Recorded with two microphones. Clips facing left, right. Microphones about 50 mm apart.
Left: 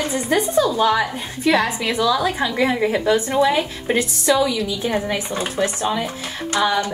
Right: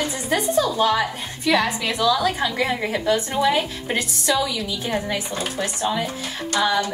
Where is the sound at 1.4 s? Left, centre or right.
Left; by 3.9 s centre.